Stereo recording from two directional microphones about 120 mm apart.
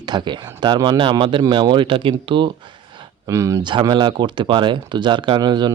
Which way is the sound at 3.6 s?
40° right (ahead or behind).